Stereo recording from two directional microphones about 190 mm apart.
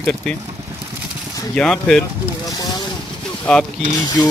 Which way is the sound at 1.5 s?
5° left (ahead or behind).